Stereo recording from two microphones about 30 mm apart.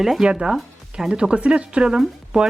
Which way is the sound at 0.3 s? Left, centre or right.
Right.